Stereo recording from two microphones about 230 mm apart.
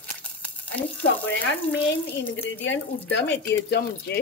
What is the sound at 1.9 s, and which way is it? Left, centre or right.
Speech, left.